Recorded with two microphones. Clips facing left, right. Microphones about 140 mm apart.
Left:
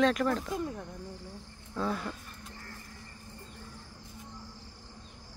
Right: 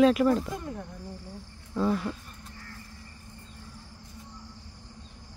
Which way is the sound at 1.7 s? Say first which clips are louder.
Right 6 dB; 5° right (ahead or behind).